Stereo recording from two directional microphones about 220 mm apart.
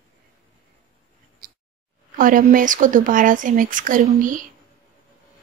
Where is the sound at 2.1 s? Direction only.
40° right (ahead or behind).